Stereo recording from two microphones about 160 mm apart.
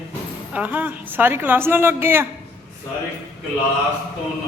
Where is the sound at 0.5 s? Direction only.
10° right (ahead or behind).